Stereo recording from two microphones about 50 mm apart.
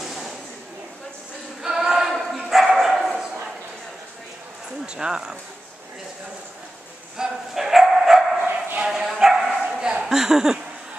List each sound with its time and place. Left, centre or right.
0.0 s a sound: centre
1.6 s dog: centre
4.8 s speech: centre
7.2 s bow-wow: centre
9.7 s a sound: centre
10.0 s speech: centre